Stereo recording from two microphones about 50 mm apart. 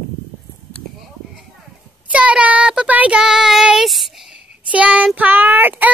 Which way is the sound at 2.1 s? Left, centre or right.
Right.